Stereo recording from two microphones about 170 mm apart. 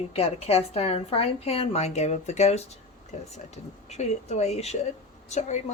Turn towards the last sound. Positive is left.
turn(degrees=40)  # may be behind; listen again after turning